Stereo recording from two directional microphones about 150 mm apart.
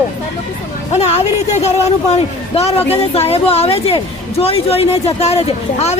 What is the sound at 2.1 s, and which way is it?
A woman's voice, 45° left (ahead or behind).